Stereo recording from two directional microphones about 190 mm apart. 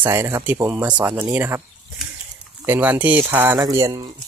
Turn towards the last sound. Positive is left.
turn(degrees=-20)  # may be behind; listen again after turning